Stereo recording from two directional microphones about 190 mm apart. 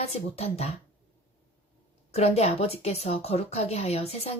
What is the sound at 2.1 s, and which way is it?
A woman's voice, 35° left (ahead or behind).